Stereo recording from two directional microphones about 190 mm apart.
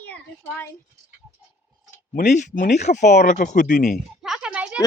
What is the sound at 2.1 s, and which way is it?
Speech, 40° left (ahead or behind).